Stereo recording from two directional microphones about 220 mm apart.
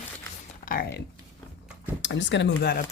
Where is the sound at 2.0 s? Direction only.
55° left (ahead or behind).